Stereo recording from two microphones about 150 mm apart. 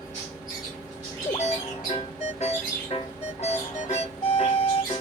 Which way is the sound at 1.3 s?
45° left (ahead or behind).